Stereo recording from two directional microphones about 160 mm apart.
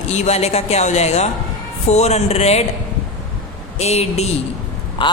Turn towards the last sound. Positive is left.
turn(degrees=30)  # may be behind; listen again after turning